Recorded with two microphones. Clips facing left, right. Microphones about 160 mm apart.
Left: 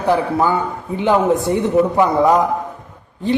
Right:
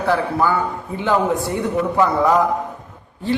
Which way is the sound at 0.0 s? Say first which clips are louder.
Left 2 dB; 20° left (ahead or behind).